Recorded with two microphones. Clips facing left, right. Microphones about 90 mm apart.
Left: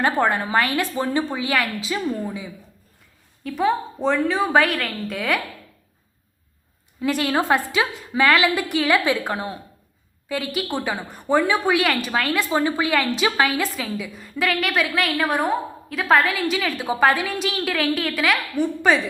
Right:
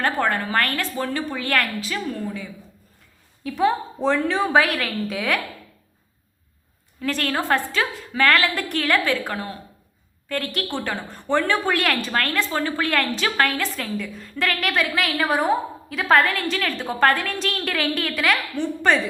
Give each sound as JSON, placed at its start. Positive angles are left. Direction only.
{"t": 0.0, "sound": "a woman's voice", "side_deg": 15}
{"t": 1.5, "sound": "a woman's voice", "side_deg": 5}
{"t": 1.8, "sound": "a woman's voice", "side_deg": 20}
{"t": 3.4, "sound": "a woman's voice", "side_deg": 0}
{"t": 7.0, "sound": "a woman's voice", "side_deg": 10}
{"t": 10.2, "sound": "a woman's voice", "side_deg": 5}
{"t": 12.5, "sound": "a woman's voice", "side_deg": 15}